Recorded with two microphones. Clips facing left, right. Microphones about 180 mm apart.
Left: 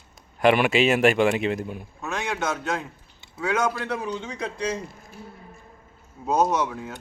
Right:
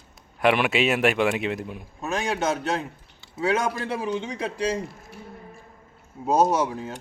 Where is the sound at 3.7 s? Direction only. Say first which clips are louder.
Right 2 dB; 20° right (ahead or behind).